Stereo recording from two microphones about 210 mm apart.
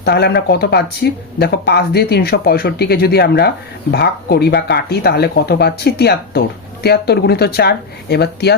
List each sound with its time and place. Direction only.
0.0 s speech: 50° left (ahead or behind)